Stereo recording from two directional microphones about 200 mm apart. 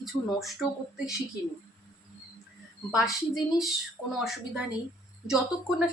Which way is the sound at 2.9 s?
Centre (ahead or behind).